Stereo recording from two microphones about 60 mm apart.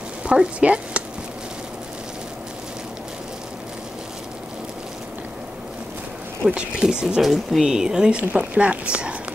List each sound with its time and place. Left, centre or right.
0.2 s speech: centre
6.5 s speech: centre
7.2 s speech: centre